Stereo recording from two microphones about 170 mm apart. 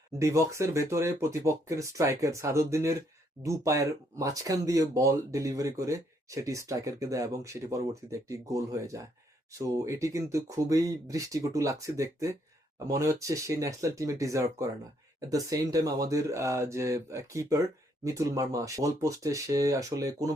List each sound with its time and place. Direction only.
0.2 s speech: 15° right (ahead or behind)